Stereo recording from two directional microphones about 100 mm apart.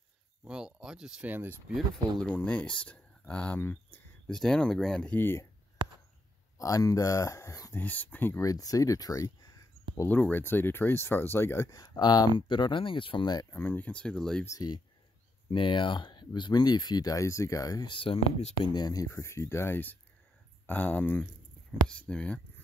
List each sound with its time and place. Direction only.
0.5 s speech: 5° right (ahead or behind)
1.3 s speech: 20° right (ahead or behind)
2.1 s speech: 15° left (ahead or behind)
6.6 s speech: 35° left (ahead or behind)
7.7 s speech: 15° left (ahead or behind)
8.4 s speech: 35° left (ahead or behind)
10.0 s speech: 15° left (ahead or behind)
11.8 s speech: 45° left (ahead or behind)
13.5 s speech: 20° left (ahead or behind)
14.4 s speech: 30° left (ahead or behind)
15.5 s speech: 55° left (ahead or behind); by 17.8 s 35° left (ahead or behind)
17.8 s speech: 60° left (ahead or behind)
18.7 s speech: 45° left (ahead or behind); by 22.4 s 15° left (ahead or behind)